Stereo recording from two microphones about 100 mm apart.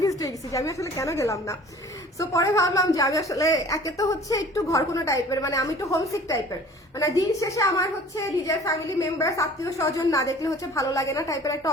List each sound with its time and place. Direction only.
0.0 s a woman's voice: 35° left (ahead or behind)